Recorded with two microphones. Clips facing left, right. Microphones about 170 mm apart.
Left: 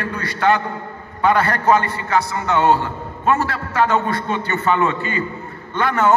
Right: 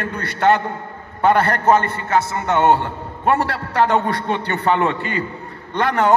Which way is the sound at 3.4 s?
65° right (ahead or behind).